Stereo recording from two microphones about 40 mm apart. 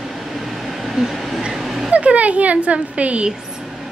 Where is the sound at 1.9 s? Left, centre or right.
Right.